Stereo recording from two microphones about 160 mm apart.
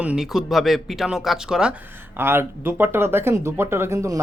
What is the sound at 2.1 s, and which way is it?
Speech, 15° right (ahead or behind).